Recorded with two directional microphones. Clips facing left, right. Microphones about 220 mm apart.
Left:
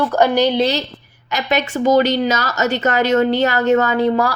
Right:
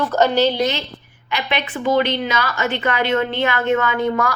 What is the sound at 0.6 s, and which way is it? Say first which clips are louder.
A woman's voice: left 3 dB; 35° left (ahead or behind).